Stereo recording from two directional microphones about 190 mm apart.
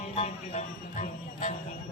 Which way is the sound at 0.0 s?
35° left (ahead or behind).